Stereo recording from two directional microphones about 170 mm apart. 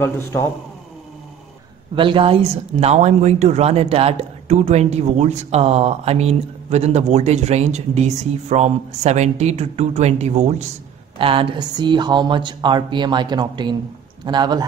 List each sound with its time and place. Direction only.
0.0 s a man's voice: 15° left (ahead or behind)
2.0 s speech: 30° right (ahead or behind)